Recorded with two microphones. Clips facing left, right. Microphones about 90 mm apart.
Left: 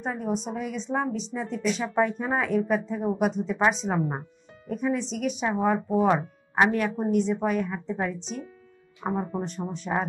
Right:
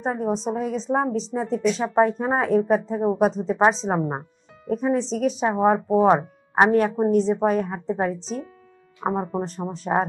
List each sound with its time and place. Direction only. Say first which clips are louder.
0.0 s speech: right 5 dB; 35° right (ahead or behind)